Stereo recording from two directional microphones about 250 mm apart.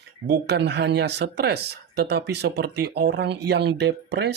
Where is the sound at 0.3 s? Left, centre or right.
Right.